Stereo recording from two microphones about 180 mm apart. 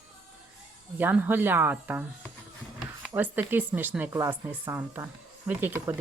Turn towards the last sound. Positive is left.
turn(degrees=-10)  # may be behind; listen again after turning